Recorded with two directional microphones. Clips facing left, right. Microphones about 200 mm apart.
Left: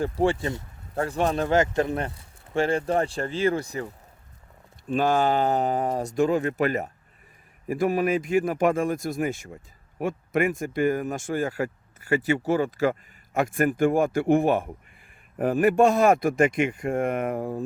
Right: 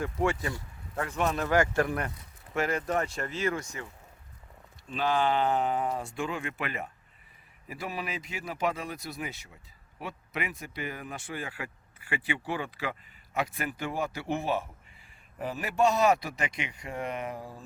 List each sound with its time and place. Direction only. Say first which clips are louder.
0.0 s speech: left 6 dB; 30° left (ahead or behind)
4.9 s speech: left 6 dB; 45° left (ahead or behind)